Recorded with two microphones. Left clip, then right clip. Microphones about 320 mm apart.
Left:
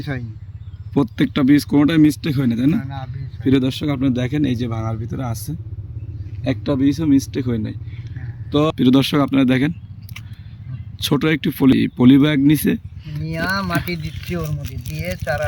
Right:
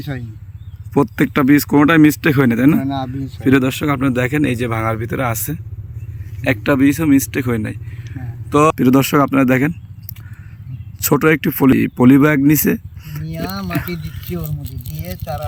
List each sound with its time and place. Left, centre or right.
0.0 s speech: centre
2.7 s speech: right
3.4 s speech: centre
6.5 s speech: centre
11.0 s speech: centre